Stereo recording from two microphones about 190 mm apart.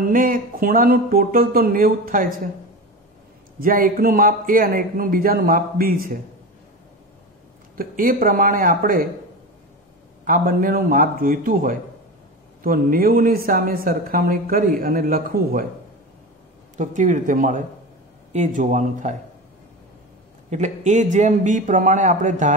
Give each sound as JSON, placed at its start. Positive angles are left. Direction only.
{"t": 0.0, "sound": "speech", "side_deg": -45}
{"t": 3.6, "sound": "speech", "side_deg": -50}
{"t": 7.7, "sound": "speech", "side_deg": -45}
{"t": 10.2, "sound": "speech", "side_deg": -45}
{"t": 16.7, "sound": "a man's voice", "side_deg": -40}
{"t": 20.4, "sound": "a man's voice", "side_deg": -40}